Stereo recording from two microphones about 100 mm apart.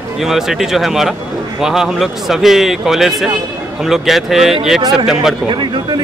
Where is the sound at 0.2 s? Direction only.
5° right (ahead or behind).